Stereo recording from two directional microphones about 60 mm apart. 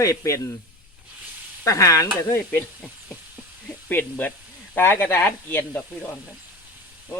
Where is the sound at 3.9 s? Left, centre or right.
Left.